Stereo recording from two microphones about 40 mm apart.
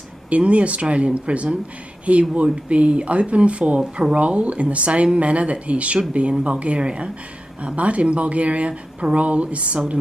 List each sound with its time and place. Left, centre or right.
0.3 s speech: right